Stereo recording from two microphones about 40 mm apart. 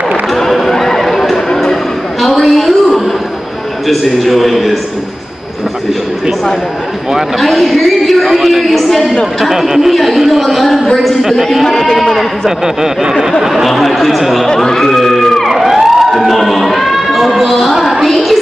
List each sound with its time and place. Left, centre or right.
0.1 s a sound: centre
3.8 s a man's voice: centre
7.3 s a man's voice: centre
9.5 s a man's voice: centre
11.6 s speech: centre
12.4 s speech: centre
13.7 s a man's voice: centre
14.5 s speech: centre
15.4 s emergency vehicle: centre
18.0 s a sound: centre